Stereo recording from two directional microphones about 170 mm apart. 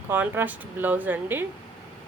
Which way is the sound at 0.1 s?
10° right (ahead or behind).